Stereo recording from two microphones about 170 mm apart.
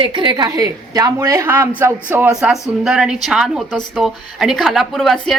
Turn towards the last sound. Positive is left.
turn(degrees=0)  # may be behind; listen again after turning